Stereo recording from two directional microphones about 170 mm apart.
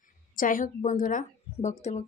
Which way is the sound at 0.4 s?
50° left (ahead or behind).